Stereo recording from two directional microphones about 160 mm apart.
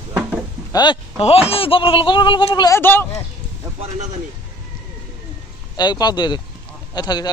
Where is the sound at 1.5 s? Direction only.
35° left (ahead or behind).